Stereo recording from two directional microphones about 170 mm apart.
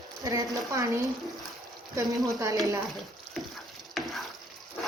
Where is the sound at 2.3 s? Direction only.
20° right (ahead or behind).